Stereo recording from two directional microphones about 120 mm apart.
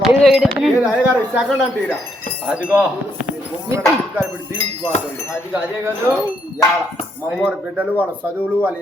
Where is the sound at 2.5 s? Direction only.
15° right (ahead or behind).